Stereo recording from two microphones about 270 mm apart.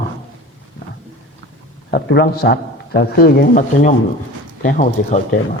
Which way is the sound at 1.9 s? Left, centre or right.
Left.